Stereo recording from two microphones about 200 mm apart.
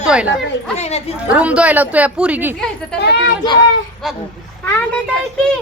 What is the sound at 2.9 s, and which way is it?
Speech, 55° left (ahead or behind).